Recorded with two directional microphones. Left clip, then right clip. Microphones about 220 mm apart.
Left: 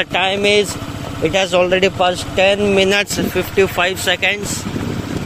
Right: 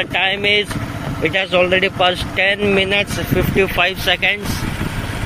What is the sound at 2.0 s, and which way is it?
Speech, 10° left (ahead or behind).